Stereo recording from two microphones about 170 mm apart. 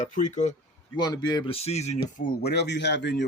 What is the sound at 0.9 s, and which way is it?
Speech, 25° left (ahead or behind).